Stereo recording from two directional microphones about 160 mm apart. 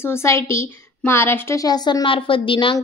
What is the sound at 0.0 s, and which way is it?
A woman's voice, 15° left (ahead or behind).